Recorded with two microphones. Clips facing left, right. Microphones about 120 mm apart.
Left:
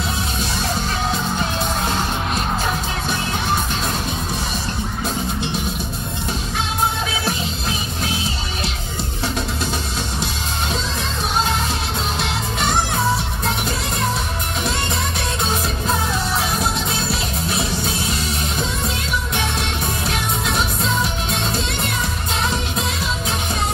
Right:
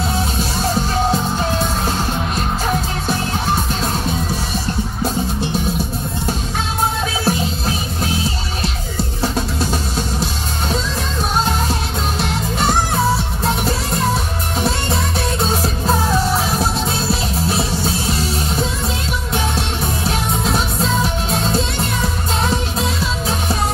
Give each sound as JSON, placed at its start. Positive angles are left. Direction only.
{"t": 7.2, "sound": "music", "side_deg": -40}
{"t": 9.2, "sound": "music", "side_deg": -40}
{"t": 17.1, "sound": "music", "side_deg": -35}
{"t": 20.1, "sound": "music", "side_deg": -35}